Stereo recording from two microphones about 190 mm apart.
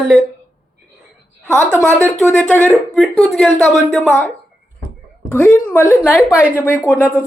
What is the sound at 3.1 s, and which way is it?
A woman's voice, 5° left (ahead or behind).